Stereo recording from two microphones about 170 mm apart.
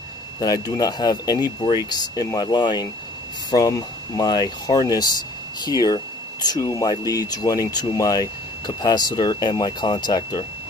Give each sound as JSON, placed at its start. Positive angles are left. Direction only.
{"t": 0.4, "sound": "speech", "side_deg": 20}